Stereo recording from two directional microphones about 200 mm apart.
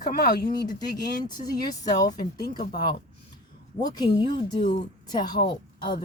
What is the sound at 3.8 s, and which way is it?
Speech, 20° left (ahead or behind).